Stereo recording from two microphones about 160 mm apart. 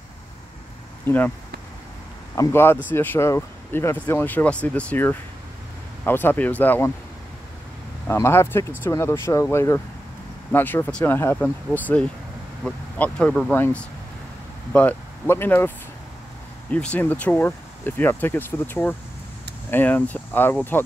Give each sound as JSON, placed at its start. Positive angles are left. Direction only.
{"t": 1.0, "sound": "speech", "side_deg": 10}
{"t": 2.3, "sound": "speech", "side_deg": 15}
{"t": 8.1, "sound": "speech", "side_deg": 15}
{"t": 16.7, "sound": "speech", "side_deg": 10}